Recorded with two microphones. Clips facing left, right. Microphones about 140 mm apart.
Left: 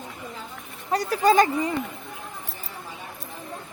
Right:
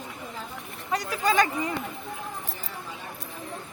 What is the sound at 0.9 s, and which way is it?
Speech, 35° left (ahead or behind).